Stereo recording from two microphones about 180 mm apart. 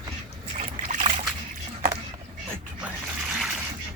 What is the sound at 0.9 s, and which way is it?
Boat, 40° right (ahead or behind).